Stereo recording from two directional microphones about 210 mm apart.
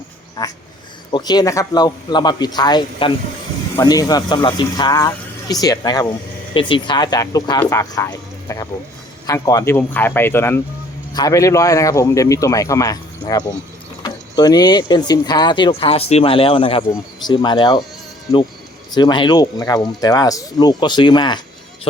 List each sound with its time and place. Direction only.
0.4 s speech: 20° left (ahead or behind)
18.9 s speech: 20° left (ahead or behind)